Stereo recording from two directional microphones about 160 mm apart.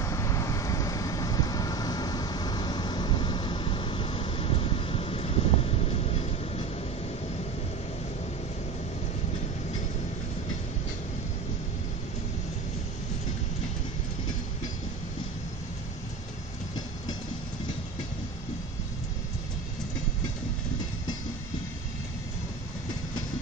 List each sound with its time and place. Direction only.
0.0 s vehicle: 20° left (ahead or behind); by 6.6 s 40° left (ahead or behind)